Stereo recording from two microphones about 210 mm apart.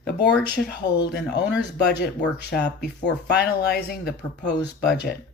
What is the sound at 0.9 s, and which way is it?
Speech, 55° left (ahead or behind).